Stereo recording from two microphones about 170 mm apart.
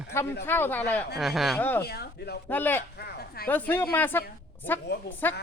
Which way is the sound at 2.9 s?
70° left (ahead or behind).